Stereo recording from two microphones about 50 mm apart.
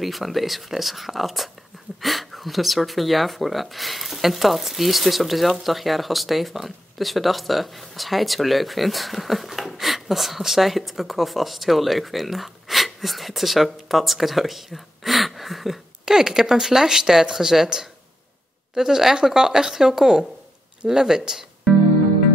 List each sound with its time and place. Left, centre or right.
0.0 s speech: centre